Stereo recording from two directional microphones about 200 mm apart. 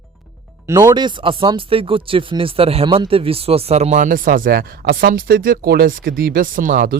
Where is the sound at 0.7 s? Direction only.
15° right (ahead or behind).